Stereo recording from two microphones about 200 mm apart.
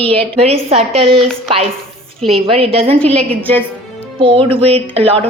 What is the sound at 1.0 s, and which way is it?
Speech, 5° left (ahead or behind).